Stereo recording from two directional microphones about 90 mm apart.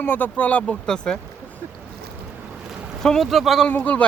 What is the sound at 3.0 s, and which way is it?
Speech, 5° left (ahead or behind).